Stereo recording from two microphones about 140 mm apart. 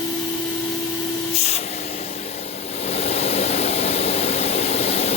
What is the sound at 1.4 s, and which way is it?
Vehicle, 50° left (ahead or behind).